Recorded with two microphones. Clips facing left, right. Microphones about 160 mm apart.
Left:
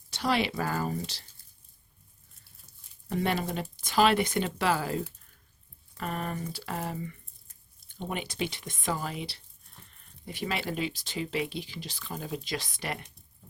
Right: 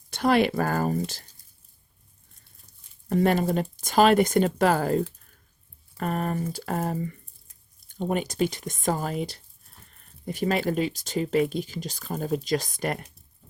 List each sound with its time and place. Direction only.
0.1 s speech: 50° right (ahead or behind)
3.1 s speech: 45° right (ahead or behind)